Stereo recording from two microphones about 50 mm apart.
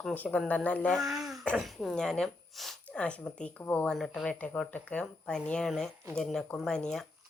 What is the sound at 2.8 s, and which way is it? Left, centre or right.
Speech, left.